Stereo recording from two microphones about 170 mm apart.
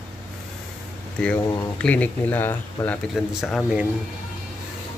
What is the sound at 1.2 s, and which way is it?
Speech, 5° left (ahead or behind).